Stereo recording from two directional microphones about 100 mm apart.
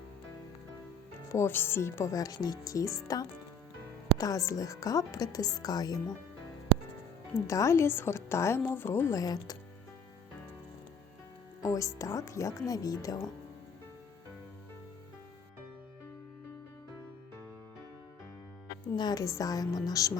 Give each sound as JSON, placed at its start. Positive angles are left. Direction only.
{"t": 1.3, "sound": "speech", "side_deg": 25}
{"t": 7.4, "sound": "a woman's voice", "side_deg": 30}
{"t": 11.6, "sound": "speech", "side_deg": 35}
{"t": 18.9, "sound": "speech", "side_deg": 40}